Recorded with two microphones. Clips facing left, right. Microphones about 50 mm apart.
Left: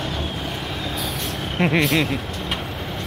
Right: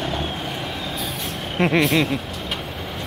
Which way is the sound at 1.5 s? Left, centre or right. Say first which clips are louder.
Right 1 dB; centre.